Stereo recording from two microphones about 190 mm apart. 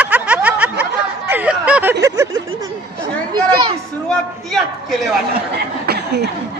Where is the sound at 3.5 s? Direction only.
25° right (ahead or behind).